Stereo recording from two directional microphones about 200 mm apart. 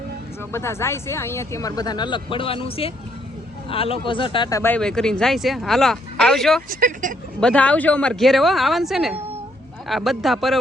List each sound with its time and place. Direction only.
0.5 s speech: 15° left (ahead or behind)
6.7 s speech: 45° right (ahead or behind)
7.4 s speech: 5° left (ahead or behind)